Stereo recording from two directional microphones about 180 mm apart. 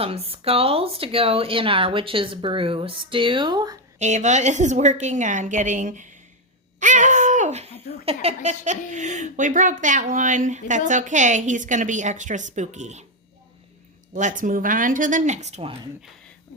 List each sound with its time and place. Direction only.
0.0 s speech: 30° right (ahead or behind)
3.9 s speech: 40° right (ahead or behind)
6.7 s laughter: 45° right (ahead or behind)
8.0 s a woman's voice: 35° right (ahead or behind)
14.1 s a woman's voice: 45° right (ahead or behind)